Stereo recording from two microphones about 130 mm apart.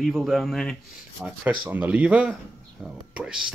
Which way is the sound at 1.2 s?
10° right (ahead or behind).